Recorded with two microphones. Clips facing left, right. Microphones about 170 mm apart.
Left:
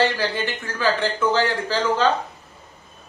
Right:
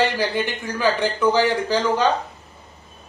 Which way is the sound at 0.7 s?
15° right (ahead or behind).